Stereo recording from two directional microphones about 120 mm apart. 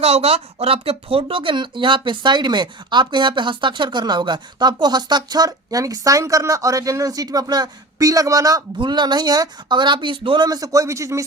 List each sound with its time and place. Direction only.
0.0 s speech: 55° right (ahead or behind); by 11.2 s 25° right (ahead or behind)